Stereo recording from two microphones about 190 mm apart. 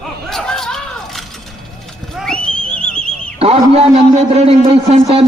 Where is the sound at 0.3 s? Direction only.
Centre (ahead or behind).